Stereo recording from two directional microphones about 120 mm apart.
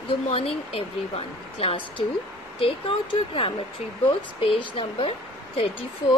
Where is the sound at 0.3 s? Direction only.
55° left (ahead or behind).